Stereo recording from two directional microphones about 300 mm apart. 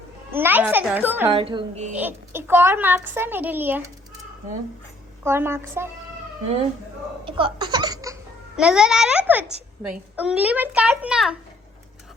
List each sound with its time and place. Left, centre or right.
0.3 s a child's voice: centre
1.3 s a child's voice: centre
2.0 s a child's voice: centre
5.2 s a child's voice: centre
7.3 s speech: centre
8.5 s a child's voice: centre